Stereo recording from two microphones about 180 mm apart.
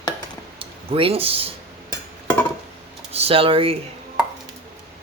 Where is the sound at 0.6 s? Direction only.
30° right (ahead or behind).